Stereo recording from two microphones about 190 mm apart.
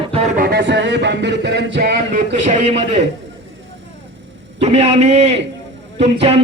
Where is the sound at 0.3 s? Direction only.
55° right (ahead or behind).